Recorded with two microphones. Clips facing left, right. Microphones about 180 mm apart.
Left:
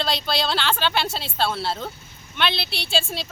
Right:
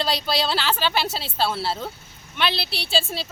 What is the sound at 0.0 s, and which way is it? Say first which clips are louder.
Speech: right 1 dB; 5° right (ahead or behind).